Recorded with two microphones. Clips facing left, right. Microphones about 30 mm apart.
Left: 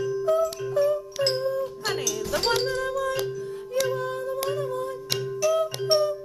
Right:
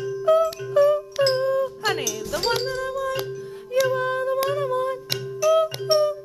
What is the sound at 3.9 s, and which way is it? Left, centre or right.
Humming, right.